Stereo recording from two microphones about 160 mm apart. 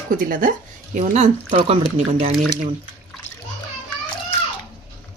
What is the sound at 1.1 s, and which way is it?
Speech, 40° right (ahead or behind).